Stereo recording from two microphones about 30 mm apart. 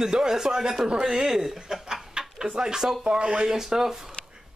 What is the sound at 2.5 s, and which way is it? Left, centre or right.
Speech, right.